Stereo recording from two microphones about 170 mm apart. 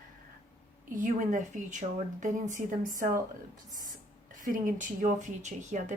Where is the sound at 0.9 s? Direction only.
50° right (ahead or behind).